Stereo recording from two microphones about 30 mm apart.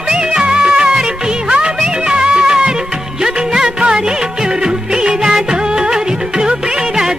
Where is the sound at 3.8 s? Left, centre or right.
Right.